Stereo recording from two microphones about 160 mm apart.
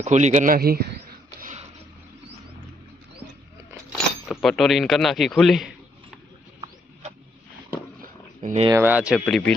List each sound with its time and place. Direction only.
0.0 s a man's voice: 45° right (ahead or behind); by 0.9 s 75° right (ahead or behind)
4.4 s a man's voice: centre (ahead or behind)
8.0 s a sound: 55° right (ahead or behind)
8.7 s speech: 10° right (ahead or behind)
9.2 s a man's voice: 5° left (ahead or behind)